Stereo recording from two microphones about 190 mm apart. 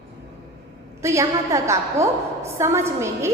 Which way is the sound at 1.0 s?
15° right (ahead or behind).